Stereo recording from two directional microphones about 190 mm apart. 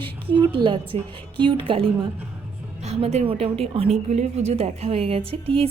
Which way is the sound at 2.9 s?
35° right (ahead or behind).